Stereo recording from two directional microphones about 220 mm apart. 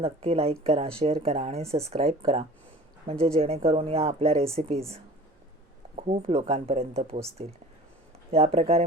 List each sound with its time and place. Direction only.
0.0 s speech: 25° right (ahead or behind)
6.0 s speech: 30° right (ahead or behind)